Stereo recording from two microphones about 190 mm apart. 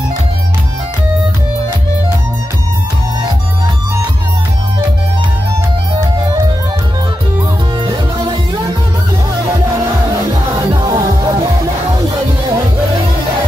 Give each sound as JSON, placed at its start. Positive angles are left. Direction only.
{"t": 7.8, "sound": "music", "side_deg": -25}
{"t": 10.7, "sound": "music", "side_deg": -20}